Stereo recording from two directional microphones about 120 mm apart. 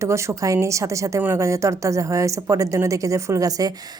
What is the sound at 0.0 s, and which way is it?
A woman's voice, 25° right (ahead or behind).